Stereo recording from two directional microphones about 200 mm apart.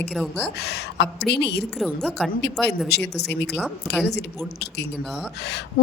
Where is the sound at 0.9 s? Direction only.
60° left (ahead or behind).